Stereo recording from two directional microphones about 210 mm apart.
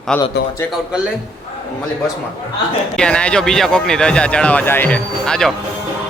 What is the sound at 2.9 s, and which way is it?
Speech, 5° left (ahead or behind).